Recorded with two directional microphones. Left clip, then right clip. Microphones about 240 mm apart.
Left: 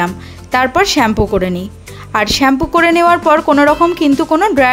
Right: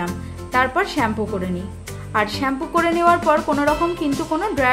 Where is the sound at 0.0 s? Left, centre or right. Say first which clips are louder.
Left 10 dB; left.